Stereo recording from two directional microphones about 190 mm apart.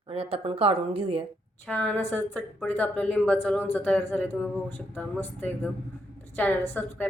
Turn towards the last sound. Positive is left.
turn(degrees=10)  # may be behind; listen again after turning